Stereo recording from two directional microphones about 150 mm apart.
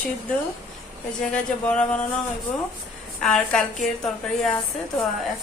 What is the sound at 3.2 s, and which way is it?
Speech, 5° left (ahead or behind).